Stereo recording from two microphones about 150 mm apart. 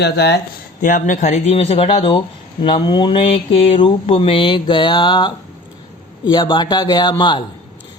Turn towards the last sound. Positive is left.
turn(degrees=30)  # may be behind; listen again after turning